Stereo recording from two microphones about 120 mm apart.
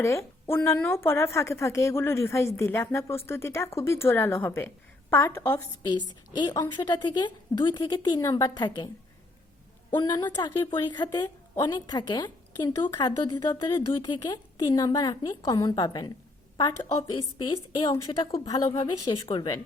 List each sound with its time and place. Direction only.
0.0 s speech: 25° left (ahead or behind)
6.3 s a woman's voice: 35° left (ahead or behind)
9.9 s a woman's voice: 35° left (ahead or behind)
16.6 s a woman's voice: 45° left (ahead or behind)
17.8 s a woman's voice: 35° left (ahead or behind)
18.4 s a woman's voice: 35° left (ahead or behind)